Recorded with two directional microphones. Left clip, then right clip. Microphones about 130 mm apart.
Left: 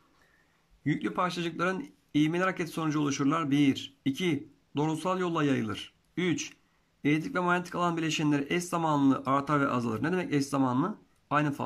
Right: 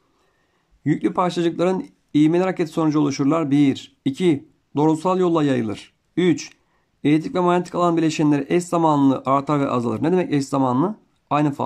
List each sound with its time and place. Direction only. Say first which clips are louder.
0.8 s speech: right 9 dB; 40° right (ahead or behind)